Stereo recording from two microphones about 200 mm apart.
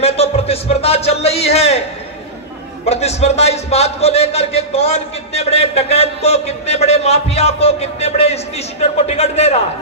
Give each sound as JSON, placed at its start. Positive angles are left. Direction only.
{"t": 0.0, "sound": "a man's voice", "side_deg": 30}
{"t": 2.8, "sound": "a man's voice", "side_deg": 30}